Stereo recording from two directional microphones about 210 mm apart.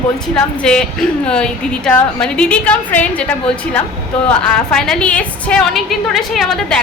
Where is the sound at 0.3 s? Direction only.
5° left (ahead or behind).